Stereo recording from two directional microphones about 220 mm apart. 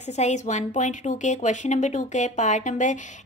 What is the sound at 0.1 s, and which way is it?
A woman's voice, 30° left (ahead or behind).